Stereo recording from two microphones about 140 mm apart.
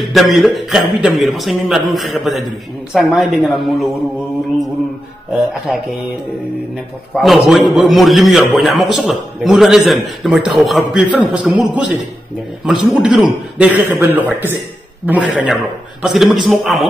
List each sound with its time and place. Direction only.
0.0 s a man's voice: centre (ahead or behind)
5.5 s a man's voice: centre (ahead or behind)
7.2 s a man's voice: centre (ahead or behind)